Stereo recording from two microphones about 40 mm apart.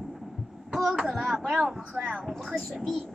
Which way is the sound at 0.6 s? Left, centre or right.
Centre.